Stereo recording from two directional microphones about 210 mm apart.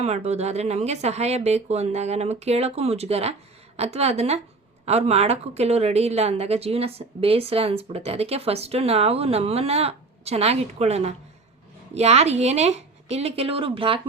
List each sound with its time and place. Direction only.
0.0 s speech: 30° right (ahead or behind)